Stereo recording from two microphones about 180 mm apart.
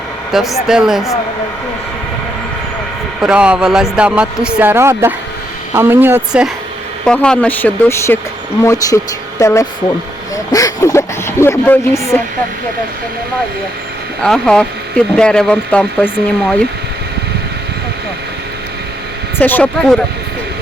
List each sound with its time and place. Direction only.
0.3 s speech: centre (ahead or behind)
3.2 s speech: 5° right (ahead or behind)
7.0 s speech: 5° left (ahead or behind)
14.2 s speech: 5° left (ahead or behind)
19.4 s speech: 10° left (ahead or behind)